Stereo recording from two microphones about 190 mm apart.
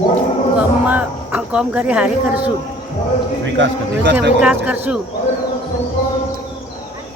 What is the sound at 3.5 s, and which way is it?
Speech, 75° right (ahead or behind).